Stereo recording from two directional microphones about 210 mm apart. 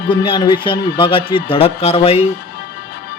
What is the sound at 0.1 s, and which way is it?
Music, 20° left (ahead or behind).